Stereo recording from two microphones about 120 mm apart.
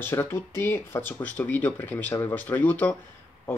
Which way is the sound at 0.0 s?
20° left (ahead or behind).